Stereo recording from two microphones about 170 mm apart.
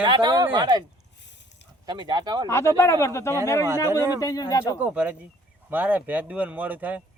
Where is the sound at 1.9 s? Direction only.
25° right (ahead or behind).